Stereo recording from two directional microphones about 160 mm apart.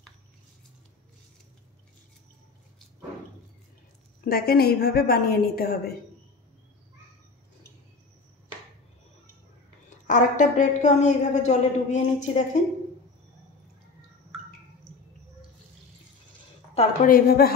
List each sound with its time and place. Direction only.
4.2 s a woman's voice: 70° left (ahead or behind)
9.8 s a woman's voice: 50° left (ahead or behind)
16.7 s a woman's voice: 60° left (ahead or behind)